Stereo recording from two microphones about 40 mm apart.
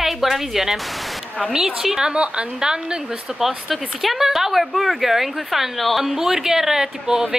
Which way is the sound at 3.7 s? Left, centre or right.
Centre.